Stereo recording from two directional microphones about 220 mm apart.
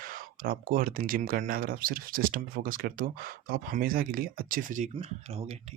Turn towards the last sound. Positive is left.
turn(degrees=-30)  # may be behind; listen again after turning